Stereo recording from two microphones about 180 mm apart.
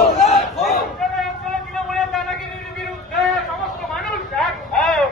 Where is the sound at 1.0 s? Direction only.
Centre (ahead or behind).